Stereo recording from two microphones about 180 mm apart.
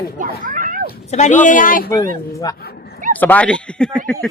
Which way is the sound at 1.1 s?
40° left (ahead or behind).